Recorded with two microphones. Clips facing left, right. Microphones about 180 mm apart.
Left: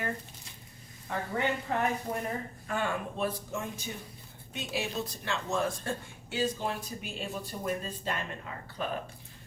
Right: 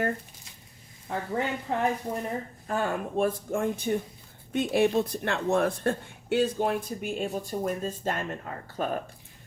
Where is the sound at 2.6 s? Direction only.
40° right (ahead or behind).